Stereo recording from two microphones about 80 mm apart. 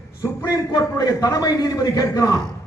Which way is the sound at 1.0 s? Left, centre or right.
Left.